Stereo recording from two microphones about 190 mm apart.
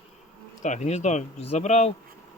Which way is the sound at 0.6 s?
40° left (ahead or behind).